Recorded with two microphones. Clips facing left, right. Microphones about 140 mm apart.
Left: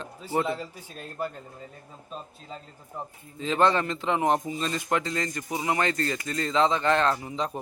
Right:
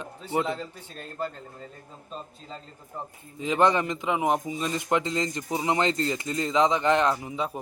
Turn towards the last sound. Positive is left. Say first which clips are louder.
# even
turn(degrees=-10)  # may be behind; listen again after turning